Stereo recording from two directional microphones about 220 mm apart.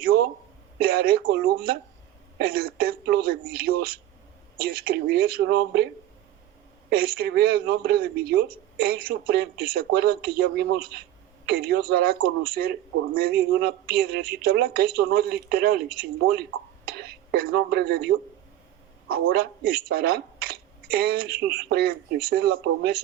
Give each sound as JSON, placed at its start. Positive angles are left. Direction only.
{"t": 0.8, "sound": "speech", "side_deg": -45}
{"t": 6.9, "sound": "speech", "side_deg": -45}
{"t": 19.1, "sound": "speech", "side_deg": -45}